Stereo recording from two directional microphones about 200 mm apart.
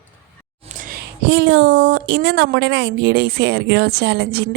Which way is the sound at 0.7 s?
40° right (ahead or behind).